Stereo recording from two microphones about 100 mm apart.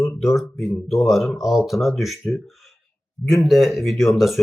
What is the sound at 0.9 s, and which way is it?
Speech, centre (ahead or behind).